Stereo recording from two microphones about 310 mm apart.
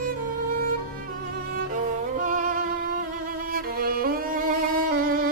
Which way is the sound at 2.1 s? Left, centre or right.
Right.